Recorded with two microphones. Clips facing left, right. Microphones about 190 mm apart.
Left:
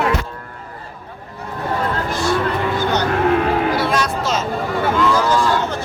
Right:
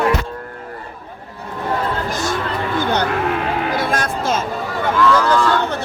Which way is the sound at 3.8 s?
50° right (ahead or behind).